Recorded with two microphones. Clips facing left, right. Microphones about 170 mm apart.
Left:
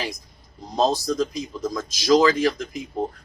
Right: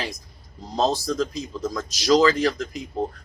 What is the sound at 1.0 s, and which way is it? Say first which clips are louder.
Speech: left 1 dB; 15° left (ahead or behind).